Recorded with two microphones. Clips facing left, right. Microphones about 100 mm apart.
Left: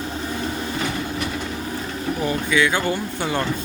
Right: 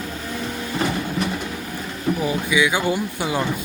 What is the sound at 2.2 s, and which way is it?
Speech, 10° right (ahead or behind).